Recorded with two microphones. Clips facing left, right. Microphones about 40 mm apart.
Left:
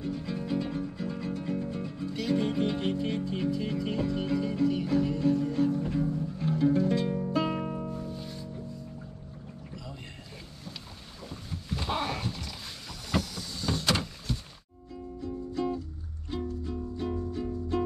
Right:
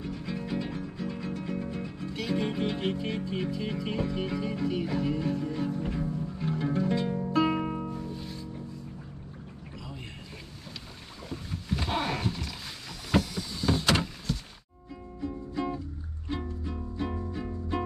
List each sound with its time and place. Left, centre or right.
0.0 s music: centre
7.1 s music: centre
7.3 s music: centre
8.0 s music: centre
11.2 s a sound: centre
13.1 s vehicle: centre
15.1 s music: centre
17.0 s music: centre